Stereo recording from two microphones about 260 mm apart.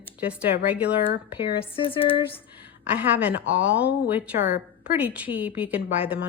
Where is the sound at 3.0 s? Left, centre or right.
Centre.